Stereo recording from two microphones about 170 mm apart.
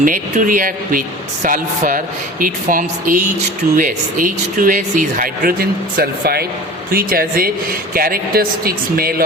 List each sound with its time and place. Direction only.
0.0 s a man's voice: 50° right (ahead or behind)